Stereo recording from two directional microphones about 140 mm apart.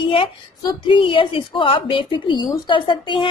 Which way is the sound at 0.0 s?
40° left (ahead or behind).